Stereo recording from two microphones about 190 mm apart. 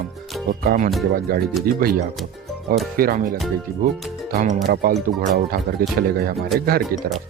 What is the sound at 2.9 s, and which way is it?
Speech, 50° right (ahead or behind).